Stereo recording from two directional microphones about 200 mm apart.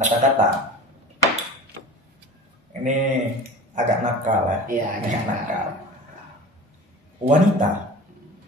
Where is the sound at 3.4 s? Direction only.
40° right (ahead or behind).